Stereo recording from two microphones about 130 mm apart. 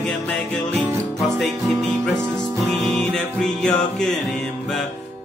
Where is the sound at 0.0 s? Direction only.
5° left (ahead or behind).